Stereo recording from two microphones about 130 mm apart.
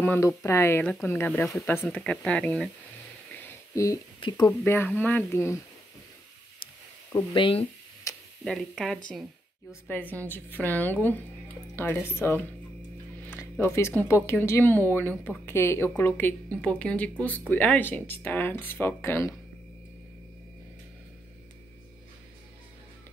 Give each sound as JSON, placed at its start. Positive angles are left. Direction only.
{"t": 0.0, "sound": "speech", "side_deg": 15}
{"t": 3.3, "sound": "a sound", "side_deg": 20}
{"t": 4.5, "sound": "speech", "side_deg": 20}
{"t": 7.1, "sound": "speech", "side_deg": 35}
{"t": 8.1, "sound": "tick-tock", "side_deg": 25}
{"t": 8.5, "sound": "speech", "side_deg": 5}
{"t": 9.7, "sound": "speech", "side_deg": 15}